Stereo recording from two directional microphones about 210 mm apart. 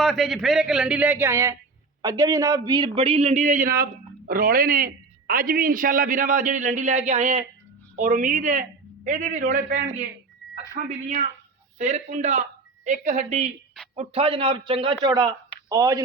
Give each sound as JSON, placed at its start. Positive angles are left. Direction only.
{"t": 0.0, "sound": "a man's voice", "side_deg": 0}